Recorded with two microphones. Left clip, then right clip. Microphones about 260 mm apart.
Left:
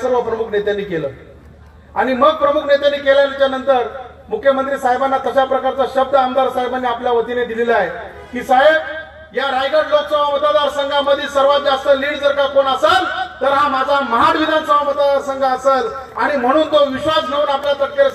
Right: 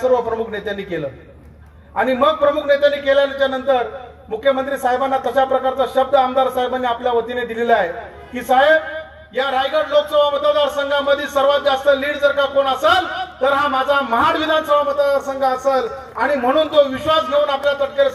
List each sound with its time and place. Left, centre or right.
0.1 s a man's voice: right
2.0 s a man's voice: right